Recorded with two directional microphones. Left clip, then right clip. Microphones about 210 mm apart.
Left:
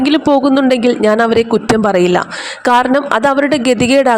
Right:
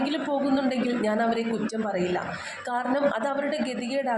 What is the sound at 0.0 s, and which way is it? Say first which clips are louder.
Speech: left 15 dB; 45° left (ahead or behind).